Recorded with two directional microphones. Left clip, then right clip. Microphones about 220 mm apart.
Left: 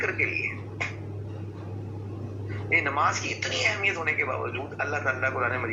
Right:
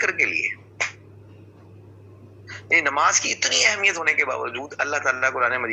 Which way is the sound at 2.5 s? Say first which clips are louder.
Right 5 dB; 40° right (ahead or behind).